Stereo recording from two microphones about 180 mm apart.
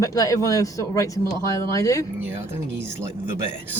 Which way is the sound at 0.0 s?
20° left (ahead or behind).